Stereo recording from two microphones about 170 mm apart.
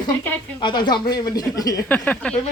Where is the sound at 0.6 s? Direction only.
25° left (ahead or behind).